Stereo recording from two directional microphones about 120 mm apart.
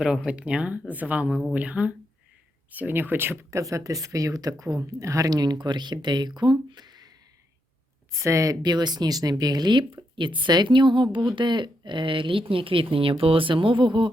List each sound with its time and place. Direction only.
0.0 s speech: 5° right (ahead or behind); by 7.1 s 35° right (ahead or behind)
8.1 s speech: 25° right (ahead or behind); by 14.1 s 40° right (ahead or behind)